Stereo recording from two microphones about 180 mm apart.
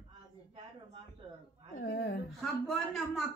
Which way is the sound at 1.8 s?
80° left.